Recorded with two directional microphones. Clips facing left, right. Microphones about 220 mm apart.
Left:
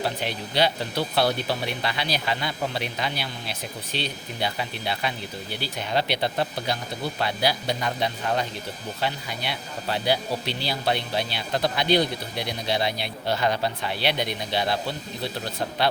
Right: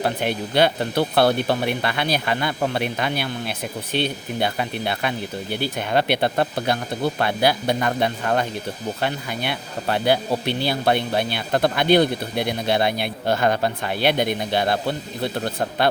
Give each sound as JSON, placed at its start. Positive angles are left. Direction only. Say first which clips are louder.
{"t": 0.0, "sound": "speech", "louder": "right 5 dB", "side_deg": -55}